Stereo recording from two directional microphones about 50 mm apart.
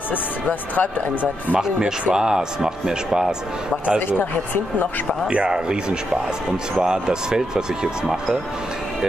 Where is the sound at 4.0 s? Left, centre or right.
Left.